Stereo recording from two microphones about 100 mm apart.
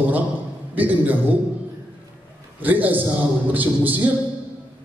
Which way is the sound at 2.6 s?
20° right (ahead or behind).